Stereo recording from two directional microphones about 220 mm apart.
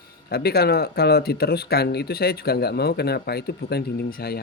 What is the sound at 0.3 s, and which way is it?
Speech, 45° left (ahead or behind).